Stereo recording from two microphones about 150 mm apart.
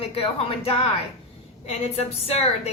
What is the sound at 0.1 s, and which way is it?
Speech, 40° left (ahead or behind).